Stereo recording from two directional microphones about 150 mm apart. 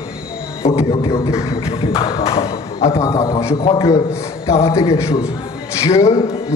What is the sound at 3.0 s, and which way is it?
A man's voice, 25° left (ahead or behind).